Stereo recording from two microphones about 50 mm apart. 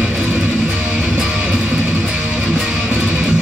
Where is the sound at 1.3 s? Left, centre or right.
Right.